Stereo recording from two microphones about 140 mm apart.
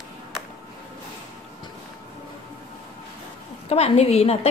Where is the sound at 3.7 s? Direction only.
45° left (ahead or behind).